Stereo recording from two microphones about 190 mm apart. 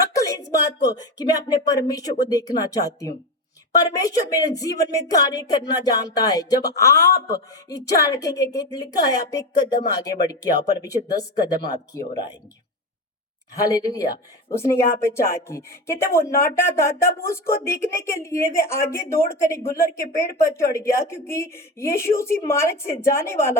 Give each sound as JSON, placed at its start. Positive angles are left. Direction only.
{"t": 0.0, "sound": "a woman's voice", "side_deg": 20}
{"t": 13.6, "sound": "a woman's voice", "side_deg": 20}